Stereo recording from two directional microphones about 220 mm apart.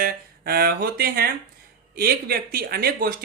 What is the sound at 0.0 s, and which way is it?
A woman's voice, 45° right (ahead or behind).